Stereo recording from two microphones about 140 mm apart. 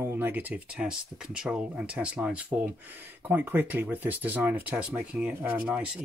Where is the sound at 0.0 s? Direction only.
15° right (ahead or behind).